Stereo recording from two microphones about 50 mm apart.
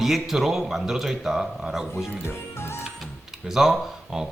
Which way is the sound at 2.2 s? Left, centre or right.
Left.